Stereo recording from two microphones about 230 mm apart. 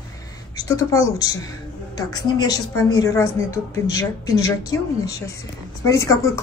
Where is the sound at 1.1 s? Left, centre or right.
Centre.